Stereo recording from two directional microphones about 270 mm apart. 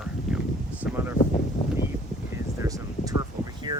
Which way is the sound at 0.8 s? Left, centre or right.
Centre.